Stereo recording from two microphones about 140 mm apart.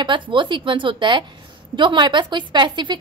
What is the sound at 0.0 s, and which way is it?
A woman's voice, 35° right (ahead or behind).